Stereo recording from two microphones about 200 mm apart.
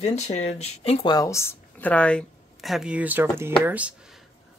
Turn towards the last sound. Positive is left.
turn(degrees=-10)  # may be behind; listen again after turning